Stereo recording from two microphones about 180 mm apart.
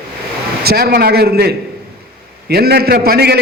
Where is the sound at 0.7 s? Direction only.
60° right (ahead or behind).